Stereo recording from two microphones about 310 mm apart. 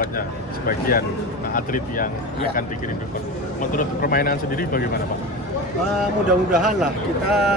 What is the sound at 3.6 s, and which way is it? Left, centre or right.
Speech, left.